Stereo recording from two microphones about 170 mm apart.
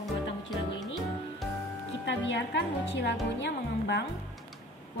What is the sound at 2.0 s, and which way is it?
Music, 90° left.